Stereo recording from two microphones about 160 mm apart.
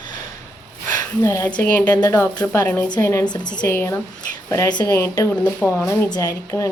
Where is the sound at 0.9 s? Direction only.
20° left (ahead or behind).